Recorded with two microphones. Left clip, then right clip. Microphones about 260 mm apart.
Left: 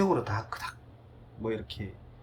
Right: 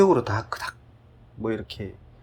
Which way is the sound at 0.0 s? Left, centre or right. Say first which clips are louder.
Right 9 dB; right.